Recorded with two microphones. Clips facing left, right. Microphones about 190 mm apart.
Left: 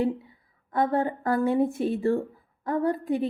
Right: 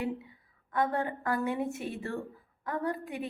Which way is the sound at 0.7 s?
35° left (ahead or behind).